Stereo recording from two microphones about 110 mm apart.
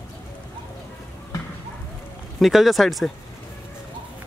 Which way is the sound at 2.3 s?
Centre (ahead or behind).